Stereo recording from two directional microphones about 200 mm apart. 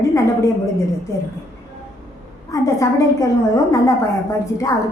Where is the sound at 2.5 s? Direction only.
15° left (ahead or behind).